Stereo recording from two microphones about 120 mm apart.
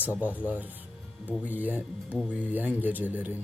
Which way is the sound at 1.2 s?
15° left (ahead or behind).